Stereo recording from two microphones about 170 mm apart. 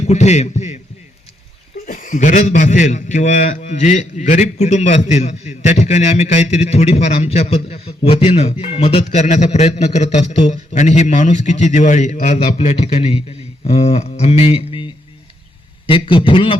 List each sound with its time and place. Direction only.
0.1 s a man's voice: 40° left (ahead or behind)
1.9 s a man's voice: 50° left (ahead or behind); by 14.8 s 30° left (ahead or behind)
15.9 s a man's voice: 30° left (ahead or behind)